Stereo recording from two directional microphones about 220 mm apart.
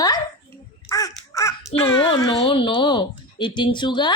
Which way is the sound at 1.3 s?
15° left (ahead or behind).